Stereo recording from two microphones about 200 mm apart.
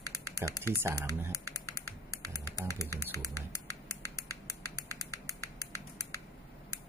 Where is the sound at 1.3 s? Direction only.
15° left (ahead or behind).